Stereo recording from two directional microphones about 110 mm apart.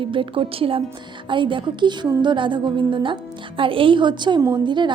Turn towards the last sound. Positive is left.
turn(degrees=-45)  # may be behind; listen again after turning